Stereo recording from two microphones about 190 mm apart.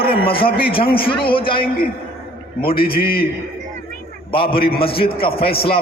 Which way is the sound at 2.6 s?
50° left (ahead or behind).